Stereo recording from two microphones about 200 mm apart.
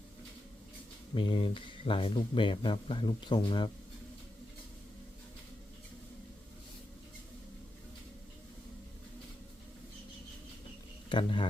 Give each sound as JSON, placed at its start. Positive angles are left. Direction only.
{"t": 1.1, "sound": "speech", "side_deg": 25}
{"t": 11.1, "sound": "speech", "side_deg": 25}